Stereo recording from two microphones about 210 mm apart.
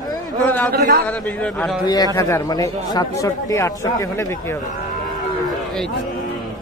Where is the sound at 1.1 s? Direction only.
5° left (ahead or behind).